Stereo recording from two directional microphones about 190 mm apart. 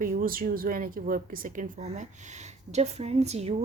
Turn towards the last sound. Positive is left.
turn(degrees=-35)  # may be behind; listen again after turning